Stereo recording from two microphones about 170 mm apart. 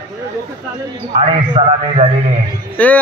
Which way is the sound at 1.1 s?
40° right (ahead or behind).